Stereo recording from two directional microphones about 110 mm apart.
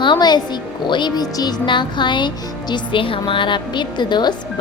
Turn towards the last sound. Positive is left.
turn(degrees=40)  # may be behind; listen again after turning